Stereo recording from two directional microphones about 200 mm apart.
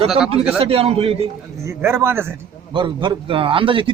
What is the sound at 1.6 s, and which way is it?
Speech, 15° right (ahead or behind).